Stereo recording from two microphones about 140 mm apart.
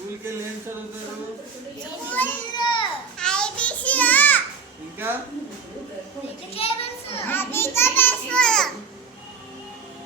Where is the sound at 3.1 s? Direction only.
5° left (ahead or behind).